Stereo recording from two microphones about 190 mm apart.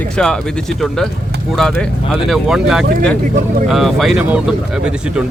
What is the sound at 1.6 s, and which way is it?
Speech, centre (ahead or behind).